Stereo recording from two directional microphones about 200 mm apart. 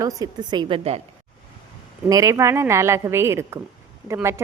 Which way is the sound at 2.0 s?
15° right (ahead or behind).